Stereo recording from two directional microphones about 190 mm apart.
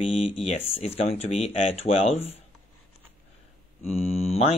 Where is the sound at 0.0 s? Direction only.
30° left (ahead or behind).